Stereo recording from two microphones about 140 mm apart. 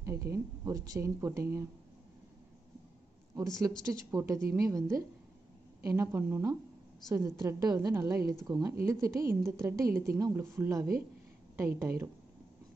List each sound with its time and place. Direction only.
0.0 s a woman's voice: 20° right (ahead or behind)
3.8 s a woman's voice: 20° right (ahead or behind)